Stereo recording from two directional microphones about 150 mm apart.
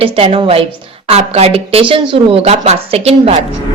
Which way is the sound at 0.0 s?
40° right (ahead or behind).